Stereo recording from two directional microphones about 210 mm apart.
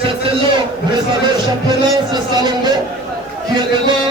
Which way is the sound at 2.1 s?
20° right (ahead or behind).